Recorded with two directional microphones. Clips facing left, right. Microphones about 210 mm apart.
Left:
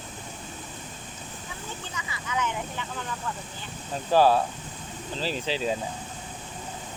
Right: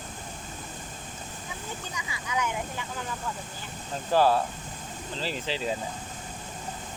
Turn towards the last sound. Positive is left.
turn(degrees=15)  # may be behind; listen again after turning